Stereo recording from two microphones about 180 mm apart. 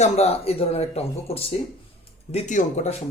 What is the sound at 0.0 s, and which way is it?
A man's voice, 35° left (ahead or behind).